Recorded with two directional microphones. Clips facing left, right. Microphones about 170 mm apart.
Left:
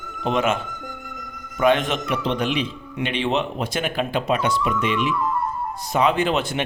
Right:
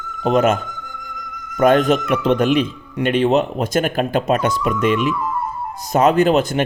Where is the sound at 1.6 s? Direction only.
45° right (ahead or behind).